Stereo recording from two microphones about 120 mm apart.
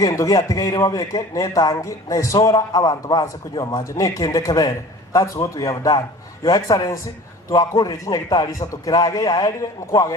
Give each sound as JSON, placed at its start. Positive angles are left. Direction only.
{"t": 0.0, "sound": "a man's voice", "side_deg": 25}